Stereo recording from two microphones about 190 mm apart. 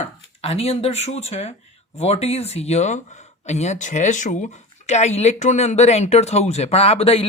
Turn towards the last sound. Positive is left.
turn(degrees=30)  # may be behind; listen again after turning